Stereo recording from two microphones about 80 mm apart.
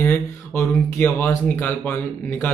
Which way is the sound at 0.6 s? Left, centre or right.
Left.